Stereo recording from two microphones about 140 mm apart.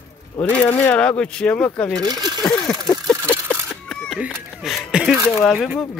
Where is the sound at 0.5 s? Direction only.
10° left (ahead or behind).